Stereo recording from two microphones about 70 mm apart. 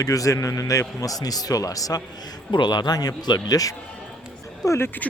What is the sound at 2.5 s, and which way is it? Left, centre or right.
Speech, left.